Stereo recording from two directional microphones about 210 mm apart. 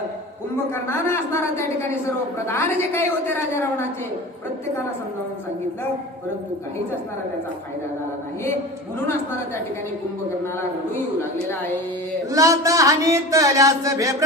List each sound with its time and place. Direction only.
0.7 s a woman's voice: 10° left (ahead or behind)
12.3 s speech: 15° right (ahead or behind)